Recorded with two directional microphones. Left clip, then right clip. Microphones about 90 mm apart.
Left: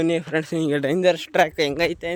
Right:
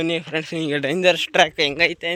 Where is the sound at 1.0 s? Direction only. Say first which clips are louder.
Right 3 dB; 15° left (ahead or behind).